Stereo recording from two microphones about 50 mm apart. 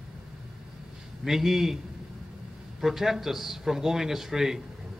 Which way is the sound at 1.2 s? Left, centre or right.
Centre.